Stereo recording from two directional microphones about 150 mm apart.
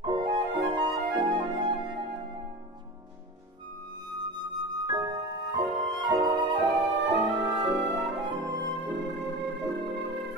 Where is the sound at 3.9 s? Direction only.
30° right (ahead or behind).